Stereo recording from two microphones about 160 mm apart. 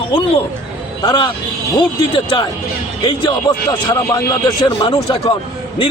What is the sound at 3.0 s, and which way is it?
Speech, 30° left (ahead or behind).